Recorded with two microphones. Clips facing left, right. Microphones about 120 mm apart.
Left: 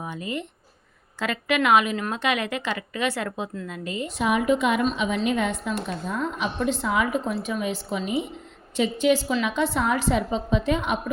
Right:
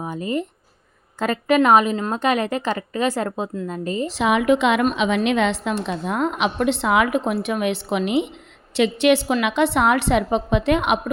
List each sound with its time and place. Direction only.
0.0 s a woman's voice: 35° right (ahead or behind)
4.1 s a woman's voice: 90° right
5.8 s a woman's voice: 75° right (ahead or behind)